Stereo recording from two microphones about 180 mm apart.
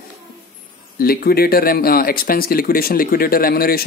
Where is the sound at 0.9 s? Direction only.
55° left (ahead or behind).